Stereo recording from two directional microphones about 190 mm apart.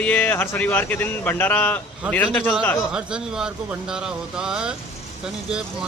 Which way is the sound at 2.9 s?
5° right (ahead or behind).